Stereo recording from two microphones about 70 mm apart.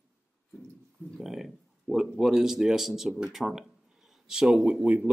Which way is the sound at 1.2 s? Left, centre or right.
Centre.